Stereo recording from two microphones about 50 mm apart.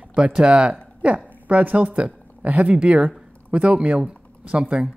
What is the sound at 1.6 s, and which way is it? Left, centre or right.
Speech, right.